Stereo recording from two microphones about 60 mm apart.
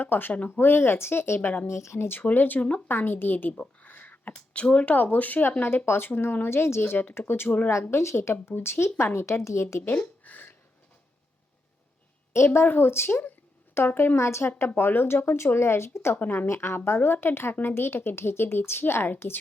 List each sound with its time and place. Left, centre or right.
0.0 s speech: left
1.4 s speech: left
1.6 s speech: left
2.9 s speech: left
3.6 s a sound: left
4.4 s speech: centre
7.7 s speech: left
9.9 s a sound: left
12.6 s speech: left
16.1 s speech: left
16.5 s speech: left